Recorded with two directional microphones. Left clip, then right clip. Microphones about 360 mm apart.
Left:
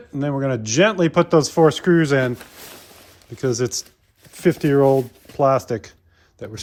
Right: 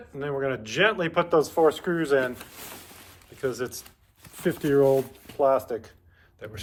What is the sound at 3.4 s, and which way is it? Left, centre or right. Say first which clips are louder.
Speech: left 8 dB; centre.